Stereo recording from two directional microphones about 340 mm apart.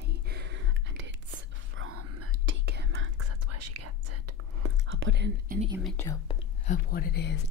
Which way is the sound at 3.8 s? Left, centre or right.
Right.